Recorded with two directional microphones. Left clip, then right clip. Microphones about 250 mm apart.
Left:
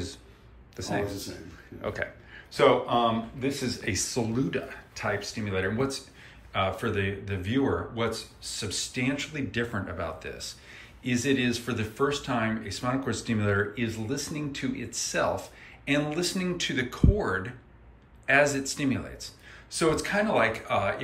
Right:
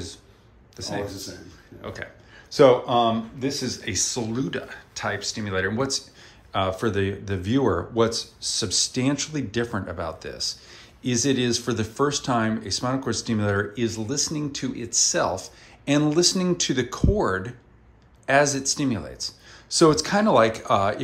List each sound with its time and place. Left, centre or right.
0.7 s speech: centre
2.5 s speech: right